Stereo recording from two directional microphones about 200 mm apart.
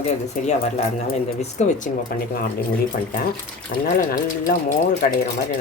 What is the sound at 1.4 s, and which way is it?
Speech, 35° left (ahead or behind).